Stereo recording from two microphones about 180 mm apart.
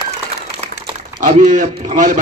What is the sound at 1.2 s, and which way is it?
A man's voice, 45° right (ahead or behind).